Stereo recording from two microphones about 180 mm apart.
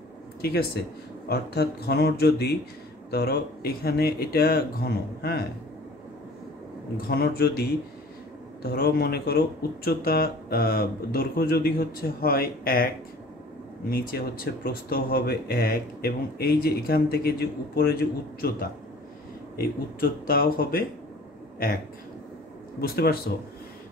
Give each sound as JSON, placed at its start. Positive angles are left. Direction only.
{"t": 0.4, "sound": "speech", "side_deg": 60}
{"t": 7.0, "sound": "speech", "side_deg": 60}
{"t": 8.7, "sound": "speech", "side_deg": 60}
{"t": 20.0, "sound": "speech", "side_deg": 55}
{"t": 22.8, "sound": "speech", "side_deg": 55}